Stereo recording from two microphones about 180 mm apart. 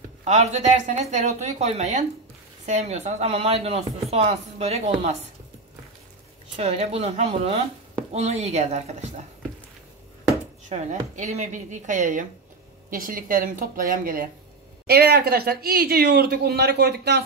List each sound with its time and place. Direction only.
0.2 s speech: 40° right (ahead or behind)
6.5 s speech: 35° right (ahead or behind)
10.7 s speech: 40° right (ahead or behind); by 17.2 s 65° right (ahead or behind)